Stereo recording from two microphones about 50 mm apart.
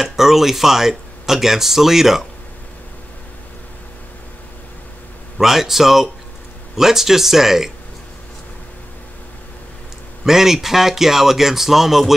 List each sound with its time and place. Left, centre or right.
0.0 s speech: centre
5.4 s speech: centre
10.2 s speech: centre